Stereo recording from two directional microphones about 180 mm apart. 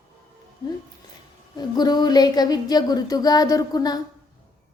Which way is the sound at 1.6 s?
25° left (ahead or behind).